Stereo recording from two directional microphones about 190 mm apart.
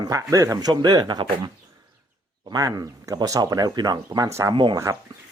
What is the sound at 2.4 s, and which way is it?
Speech, 20° right (ahead or behind).